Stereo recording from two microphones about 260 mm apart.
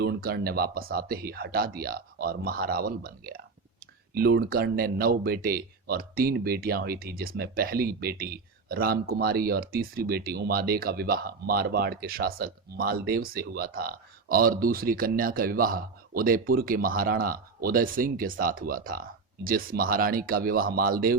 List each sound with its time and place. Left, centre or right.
0.0 s speech: right